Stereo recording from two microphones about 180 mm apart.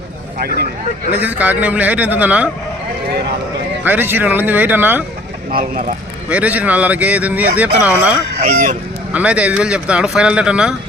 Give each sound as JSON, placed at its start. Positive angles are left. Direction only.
{"t": 1.2, "sound": "speech", "side_deg": -10}
{"t": 3.8, "sound": "speech", "side_deg": -10}
{"t": 5.5, "sound": "speech", "side_deg": -55}
{"t": 6.2, "sound": "speech", "side_deg": -5}
{"t": 8.4, "sound": "speech", "side_deg": -45}
{"t": 9.1, "sound": "speech", "side_deg": -5}